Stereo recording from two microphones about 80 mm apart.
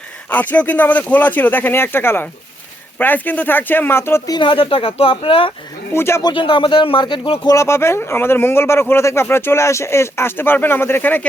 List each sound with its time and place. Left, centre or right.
0.3 s speech: left
4.4 s speech: left
5.9 s speech: left
6.2 s speech: left
7.4 s speech: left